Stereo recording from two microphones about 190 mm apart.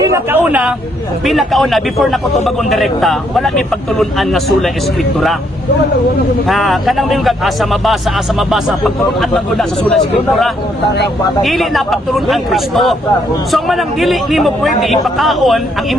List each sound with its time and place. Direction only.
0.0 s a man's voice: 15° right (ahead or behind)
6.5 s a man's voice: centre (ahead or behind)